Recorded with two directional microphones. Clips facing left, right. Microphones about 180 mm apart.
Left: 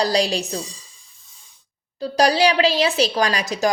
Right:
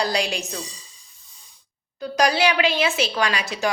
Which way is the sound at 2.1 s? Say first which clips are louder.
Left 3 dB; 35° left (ahead or behind).